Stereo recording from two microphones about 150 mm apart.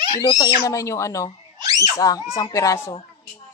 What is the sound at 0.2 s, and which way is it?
Speech, 25° left (ahead or behind).